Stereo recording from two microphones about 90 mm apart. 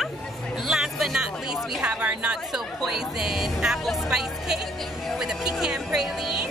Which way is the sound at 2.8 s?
5° right (ahead or behind).